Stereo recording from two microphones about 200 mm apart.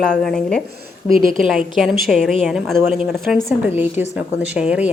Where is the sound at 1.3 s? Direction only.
Centre (ahead or behind).